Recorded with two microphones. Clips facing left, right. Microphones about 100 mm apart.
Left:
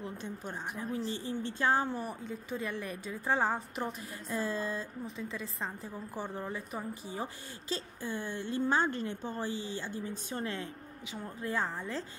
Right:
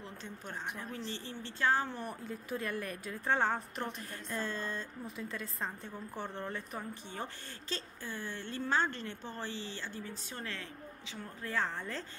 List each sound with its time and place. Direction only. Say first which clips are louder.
0.0 s a woman's voice: left 6 dB; 15° left (ahead or behind)